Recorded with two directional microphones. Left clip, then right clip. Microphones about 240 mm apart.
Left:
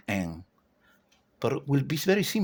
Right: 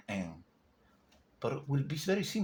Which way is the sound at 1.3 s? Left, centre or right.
Left.